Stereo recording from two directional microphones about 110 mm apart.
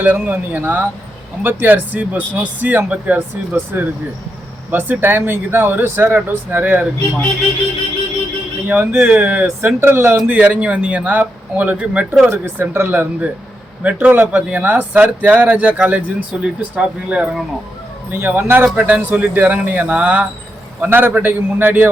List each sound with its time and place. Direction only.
0.0 s speech: 15° right (ahead or behind)
8.6 s speech: 15° right (ahead or behind)